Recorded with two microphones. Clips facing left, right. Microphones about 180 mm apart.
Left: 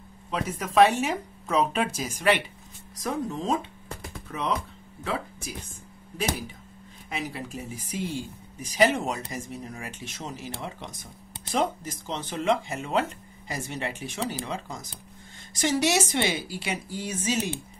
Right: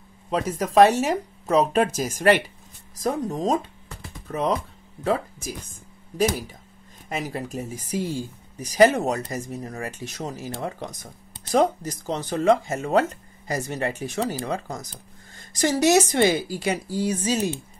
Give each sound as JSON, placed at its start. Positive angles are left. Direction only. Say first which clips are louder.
{"t": 0.3, "sound": "speech", "louder": "right 6 dB", "side_deg": -40}
{"t": 7.1, "sound": "speech", "louder": "right 4 dB", "side_deg": -45}